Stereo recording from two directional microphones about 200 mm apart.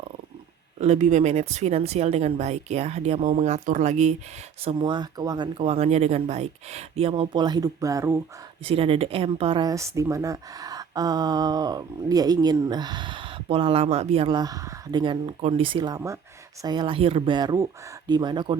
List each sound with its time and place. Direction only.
0.8 s speech: 35° right (ahead or behind); by 8.2 s 15° right (ahead or behind)
8.6 s speech: 30° right (ahead or behind)